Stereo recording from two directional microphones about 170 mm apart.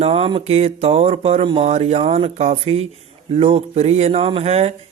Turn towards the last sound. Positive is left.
turn(degrees=-40)  # may be behind; listen again after turning